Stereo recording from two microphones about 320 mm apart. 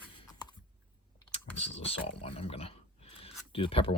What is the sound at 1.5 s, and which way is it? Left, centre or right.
Speech, centre.